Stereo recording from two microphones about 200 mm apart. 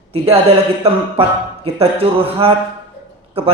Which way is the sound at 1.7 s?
30° right (ahead or behind).